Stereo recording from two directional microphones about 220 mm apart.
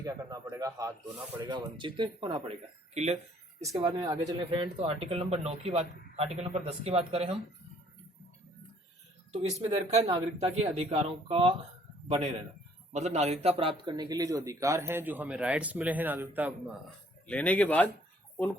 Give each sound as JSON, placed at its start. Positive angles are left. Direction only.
{"t": 0.0, "sound": "speech", "side_deg": -15}
{"t": 3.6, "sound": "speech", "side_deg": -15}
{"t": 10.0, "sound": "speech", "side_deg": -15}
{"t": 10.4, "sound": "speech", "side_deg": -25}
{"t": 17.2, "sound": "speech", "side_deg": 5}